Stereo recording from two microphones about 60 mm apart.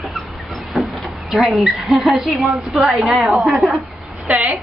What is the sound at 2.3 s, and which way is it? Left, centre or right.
A woman's voice, centre.